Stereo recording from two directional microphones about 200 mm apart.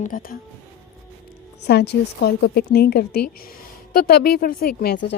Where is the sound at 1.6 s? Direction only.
55° left (ahead or behind).